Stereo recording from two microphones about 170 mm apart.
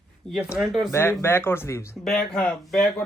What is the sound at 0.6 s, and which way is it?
Speech, centre (ahead or behind).